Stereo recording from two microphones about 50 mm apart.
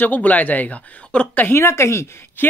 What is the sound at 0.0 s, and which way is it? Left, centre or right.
Speech, left.